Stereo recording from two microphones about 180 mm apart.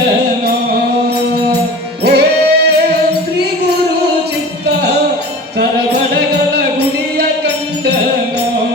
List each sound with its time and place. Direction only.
2.0 s music: 65° right (ahead or behind)
5.5 s music: 65° right (ahead or behind)